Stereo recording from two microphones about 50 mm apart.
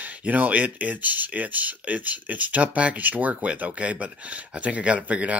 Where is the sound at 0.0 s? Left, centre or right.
Right.